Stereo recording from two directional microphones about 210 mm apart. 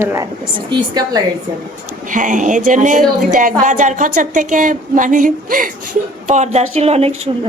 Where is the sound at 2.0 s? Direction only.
40° right (ahead or behind).